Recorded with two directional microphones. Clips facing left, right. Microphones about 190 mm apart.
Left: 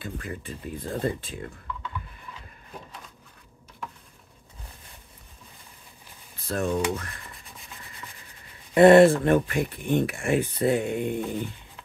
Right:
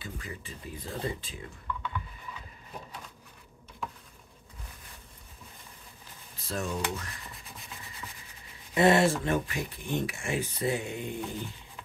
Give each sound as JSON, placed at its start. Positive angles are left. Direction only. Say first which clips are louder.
{"t": 0.0, "sound": "speech", "louder": "left 6 dB", "side_deg": 55}
{"t": 6.4, "sound": "speech", "louder": "left 7 dB", "side_deg": 55}
{"t": 8.7, "sound": "speech", "louder": "left 9 dB", "side_deg": 55}